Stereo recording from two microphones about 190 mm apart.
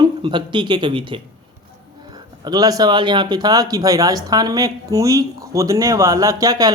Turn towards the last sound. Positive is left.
turn(degrees=-20)  # may be behind; listen again after turning